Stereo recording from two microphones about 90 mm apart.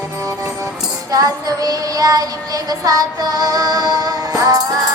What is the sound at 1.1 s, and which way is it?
Child singing, 40° right (ahead or behind).